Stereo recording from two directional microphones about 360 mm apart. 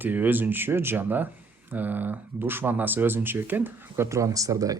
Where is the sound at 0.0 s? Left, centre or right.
Centre.